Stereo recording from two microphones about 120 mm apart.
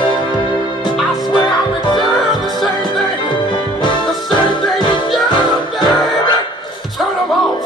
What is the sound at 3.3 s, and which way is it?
Music, 40° left (ahead or behind).